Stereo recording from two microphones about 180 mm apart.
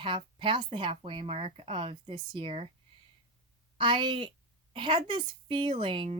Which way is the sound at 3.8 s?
25° right (ahead or behind).